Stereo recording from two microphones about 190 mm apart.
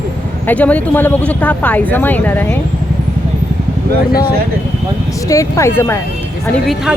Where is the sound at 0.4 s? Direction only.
10° left (ahead or behind).